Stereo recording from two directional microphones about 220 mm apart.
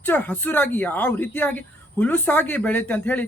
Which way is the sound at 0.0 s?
10° left (ahead or behind).